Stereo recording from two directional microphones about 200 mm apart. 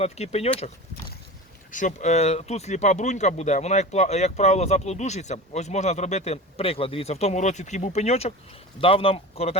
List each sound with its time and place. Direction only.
0.0 s speech: 30° left (ahead or behind)
1.7 s speech: 40° left (ahead or behind)